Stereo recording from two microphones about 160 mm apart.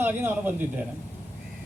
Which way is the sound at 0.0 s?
15° right (ahead or behind).